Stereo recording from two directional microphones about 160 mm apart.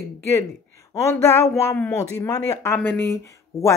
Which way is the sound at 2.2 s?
20° left (ahead or behind).